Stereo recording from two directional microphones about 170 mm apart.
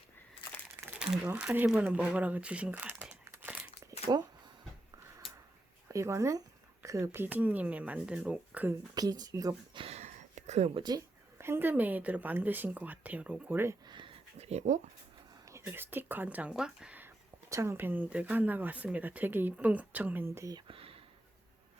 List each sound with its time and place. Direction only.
0.9 s speech: 5° right (ahead or behind)
5.9 s speech: 15° right (ahead or behind)
9.0 s speech: 20° right (ahead or behind)
9.8 s a sound: 40° right (ahead or behind)
10.8 s speech: 20° right (ahead or behind)
13.8 s a sound: 25° right (ahead or behind)
14.3 s speech: 40° right (ahead or behind)
15.4 s speech: 15° right (ahead or behind)
20.7 s a sound: 30° right (ahead or behind)